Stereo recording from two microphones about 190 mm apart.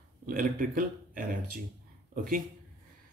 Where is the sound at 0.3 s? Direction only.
45° right (ahead or behind).